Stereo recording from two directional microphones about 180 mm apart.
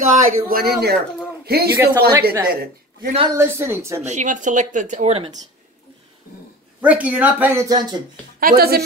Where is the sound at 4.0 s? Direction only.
40° right (ahead or behind).